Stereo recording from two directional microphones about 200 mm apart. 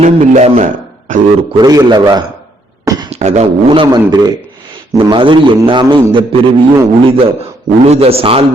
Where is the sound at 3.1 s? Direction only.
30° right (ahead or behind).